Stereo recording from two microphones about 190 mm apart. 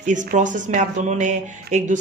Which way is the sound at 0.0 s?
40° right (ahead or behind).